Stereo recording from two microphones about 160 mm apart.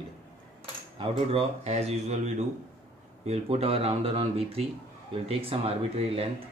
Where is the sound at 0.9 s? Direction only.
35° right (ahead or behind).